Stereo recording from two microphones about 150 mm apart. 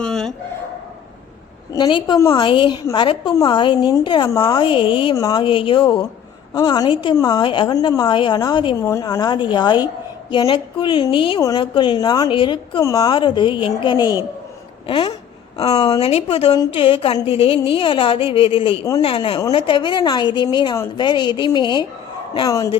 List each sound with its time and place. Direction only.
0.0 s a sound: 5° left (ahead or behind)
1.7 s a woman's voice: 30° left (ahead or behind)
11.3 s a woman's voice: 25° left (ahead or behind)
12.8 s a woman's voice: 20° left (ahead or behind)
15.9 s a woman's voice: 40° left (ahead or behind); by 22.7 s 20° left (ahead or behind)